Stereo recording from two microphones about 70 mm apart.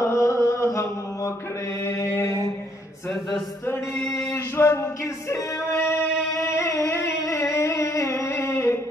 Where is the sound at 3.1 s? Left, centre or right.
Centre.